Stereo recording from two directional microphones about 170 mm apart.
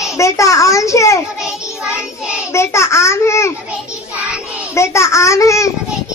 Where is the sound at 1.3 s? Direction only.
5° right (ahead or behind).